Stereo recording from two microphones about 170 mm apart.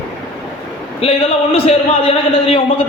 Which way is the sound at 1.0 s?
35° left (ahead or behind).